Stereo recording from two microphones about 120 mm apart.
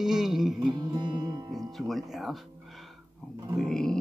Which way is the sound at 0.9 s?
35° right (ahead or behind).